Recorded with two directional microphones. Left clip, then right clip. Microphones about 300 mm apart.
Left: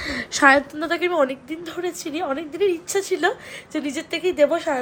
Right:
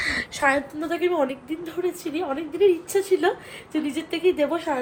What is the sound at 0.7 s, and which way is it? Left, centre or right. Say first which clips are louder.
A woman's voice: left 2 dB; centre.